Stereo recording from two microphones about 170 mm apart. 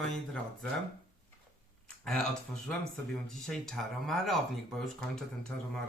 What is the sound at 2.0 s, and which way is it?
Speech, 5° left (ahead or behind).